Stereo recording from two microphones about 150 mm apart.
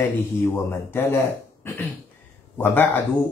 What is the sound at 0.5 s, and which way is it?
Speech, 15° left (ahead or behind).